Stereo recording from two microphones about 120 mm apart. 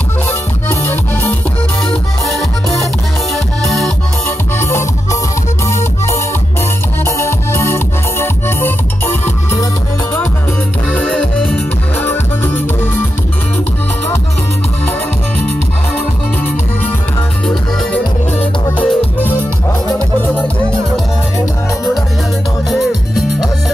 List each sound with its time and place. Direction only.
3.6 s music: centre (ahead or behind)
4.6 s music: 20° left (ahead or behind)
10.9 s music: 5° left (ahead or behind)
17.9 s music: 10° left (ahead or behind)
22.7 s music: centre (ahead or behind)